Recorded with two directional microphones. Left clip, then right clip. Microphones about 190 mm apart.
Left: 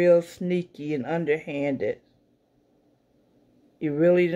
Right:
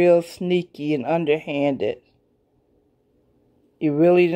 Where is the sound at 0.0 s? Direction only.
20° right (ahead or behind).